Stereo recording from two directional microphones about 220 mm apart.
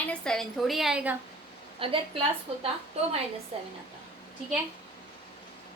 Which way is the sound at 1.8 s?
25° right (ahead or behind).